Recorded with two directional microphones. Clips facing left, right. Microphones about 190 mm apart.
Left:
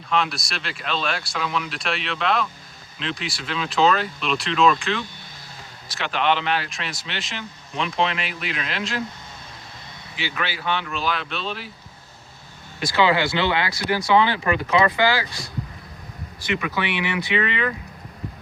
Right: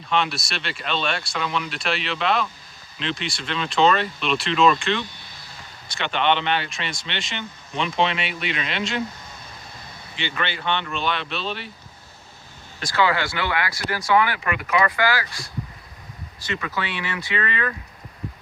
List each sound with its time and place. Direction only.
0.1 s speech: centre (ahead or behind)
10.2 s speech: 5° left (ahead or behind)
13.0 s speech: 20° left (ahead or behind)
16.5 s speech: 15° left (ahead or behind)